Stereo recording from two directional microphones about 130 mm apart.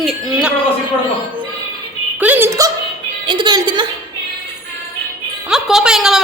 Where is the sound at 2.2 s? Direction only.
15° right (ahead or behind).